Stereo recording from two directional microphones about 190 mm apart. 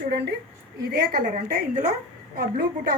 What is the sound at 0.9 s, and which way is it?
A woman's voice, 45° right (ahead or behind).